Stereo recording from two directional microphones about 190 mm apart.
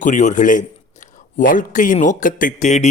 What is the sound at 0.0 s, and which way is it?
A man's voice, 40° left (ahead or behind).